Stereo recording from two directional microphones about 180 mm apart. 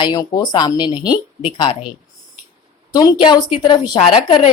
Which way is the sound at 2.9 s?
20° left (ahead or behind).